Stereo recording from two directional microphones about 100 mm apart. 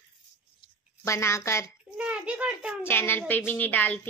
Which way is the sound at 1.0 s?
30° left (ahead or behind).